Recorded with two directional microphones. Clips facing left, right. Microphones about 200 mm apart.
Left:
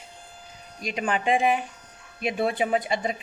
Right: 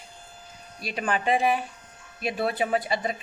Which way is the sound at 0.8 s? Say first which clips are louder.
Left 1 dB; 15° left (ahead or behind).